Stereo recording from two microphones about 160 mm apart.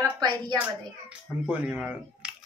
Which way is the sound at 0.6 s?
10° right (ahead or behind).